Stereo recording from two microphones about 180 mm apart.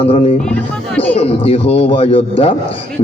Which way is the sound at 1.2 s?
35° left (ahead or behind).